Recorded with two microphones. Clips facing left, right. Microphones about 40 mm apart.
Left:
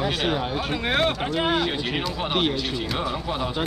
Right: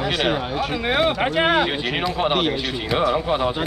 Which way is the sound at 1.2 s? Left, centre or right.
Right.